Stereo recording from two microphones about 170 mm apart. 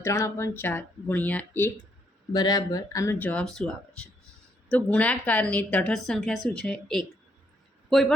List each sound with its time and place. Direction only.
0.0 s speech: 15° left (ahead or behind)
2.3 s a woman's voice: 25° left (ahead or behind); by 7.0 s 5° left (ahead or behind)